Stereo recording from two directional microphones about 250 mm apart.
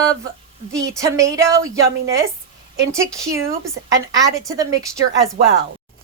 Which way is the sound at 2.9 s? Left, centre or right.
Centre.